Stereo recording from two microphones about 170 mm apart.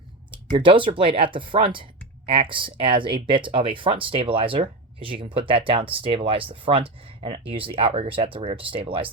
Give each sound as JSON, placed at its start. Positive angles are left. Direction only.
{"t": 0.5, "sound": "speech", "side_deg": -30}